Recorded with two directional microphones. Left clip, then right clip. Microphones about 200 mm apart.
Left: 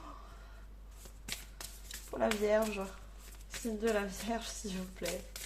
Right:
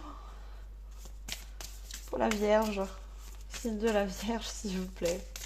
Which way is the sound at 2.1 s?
40° right (ahead or behind).